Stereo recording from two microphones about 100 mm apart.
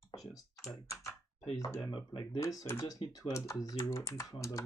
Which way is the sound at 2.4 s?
25° left (ahead or behind).